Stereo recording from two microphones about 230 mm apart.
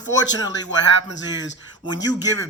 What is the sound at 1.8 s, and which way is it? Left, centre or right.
Speech, centre.